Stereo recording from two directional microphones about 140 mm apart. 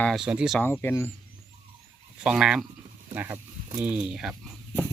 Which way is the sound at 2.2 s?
5° right (ahead or behind).